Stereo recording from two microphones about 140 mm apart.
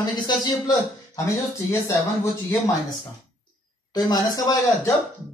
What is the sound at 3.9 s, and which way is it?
A man's voice, 30° left (ahead or behind).